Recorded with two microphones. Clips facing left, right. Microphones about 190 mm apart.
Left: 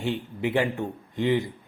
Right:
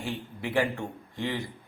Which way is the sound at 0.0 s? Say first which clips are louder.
Left 7 dB; 20° left (ahead or behind).